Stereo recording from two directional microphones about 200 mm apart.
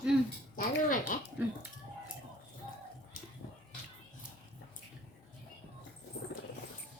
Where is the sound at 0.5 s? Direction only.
45° left (ahead or behind).